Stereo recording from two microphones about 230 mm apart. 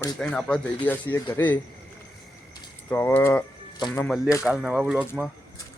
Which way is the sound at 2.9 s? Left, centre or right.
Centre.